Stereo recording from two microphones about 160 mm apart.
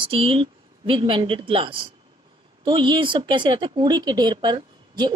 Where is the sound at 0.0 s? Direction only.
35° right (ahead or behind).